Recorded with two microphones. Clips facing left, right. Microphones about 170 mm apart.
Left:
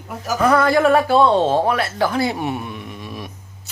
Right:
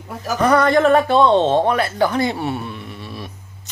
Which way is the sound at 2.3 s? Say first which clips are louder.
Even; 15° left (ahead or behind).